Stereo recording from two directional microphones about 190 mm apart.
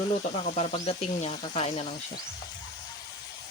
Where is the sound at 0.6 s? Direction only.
35° left (ahead or behind).